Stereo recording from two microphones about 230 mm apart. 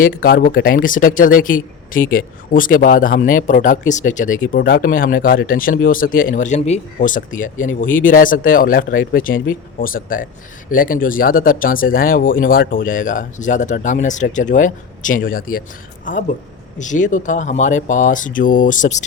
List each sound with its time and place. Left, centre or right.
0.0 s speech: left